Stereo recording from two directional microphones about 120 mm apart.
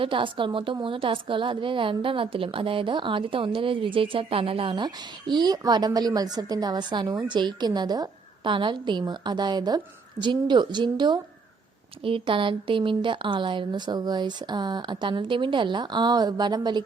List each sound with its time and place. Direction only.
0.0 s a woman's voice: 45° right (ahead or behind)
5.3 s a woman's voice: 35° right (ahead or behind)